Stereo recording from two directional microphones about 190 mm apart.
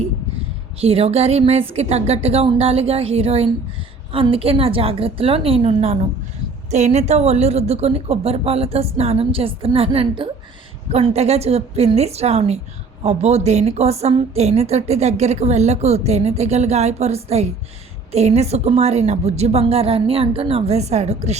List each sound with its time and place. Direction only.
0.8 s a woman's voice: 30° right (ahead or behind)